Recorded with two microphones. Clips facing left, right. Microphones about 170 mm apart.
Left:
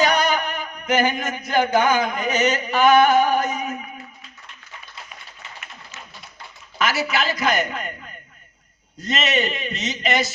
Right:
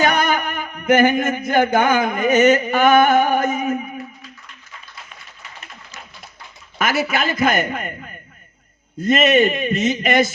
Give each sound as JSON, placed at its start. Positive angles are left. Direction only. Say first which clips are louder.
{"t": 0.0, "sound": "music", "louder": "right 1 dB", "side_deg": -55}
{"t": 1.2, "sound": "mantra", "louder": "right 4 dB", "side_deg": -50}
{"t": 6.7, "sound": "mantra", "louder": "right 2 dB", "side_deg": -50}
{"t": 9.0, "sound": "mantra", "louder": "right 8 dB", "side_deg": -50}